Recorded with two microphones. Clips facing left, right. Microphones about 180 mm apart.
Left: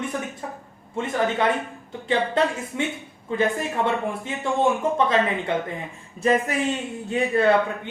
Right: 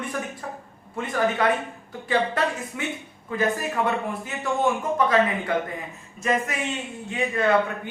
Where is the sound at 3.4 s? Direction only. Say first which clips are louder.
Left 1 dB; 25° left (ahead or behind).